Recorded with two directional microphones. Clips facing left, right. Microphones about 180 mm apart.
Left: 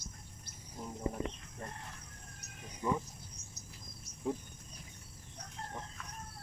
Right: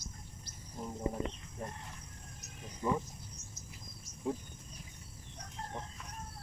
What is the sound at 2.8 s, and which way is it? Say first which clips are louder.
Speech: right 1 dB; 15° right (ahead or behind).